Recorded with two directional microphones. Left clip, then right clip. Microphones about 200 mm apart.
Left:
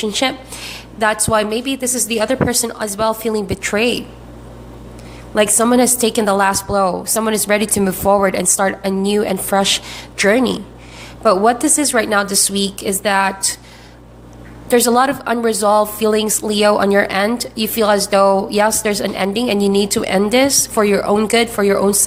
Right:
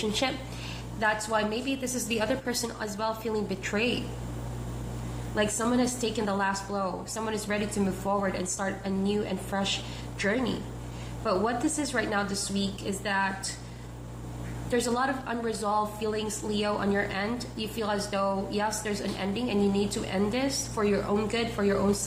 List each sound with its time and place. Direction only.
0.0 s a woman's voice: 35° left (ahead or behind)
5.3 s a woman's voice: 45° left (ahead or behind)
14.7 s a woman's voice: 50° left (ahead or behind)